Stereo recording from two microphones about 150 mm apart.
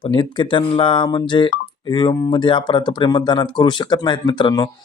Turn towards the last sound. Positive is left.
turn(degrees=30)  # may be behind; listen again after turning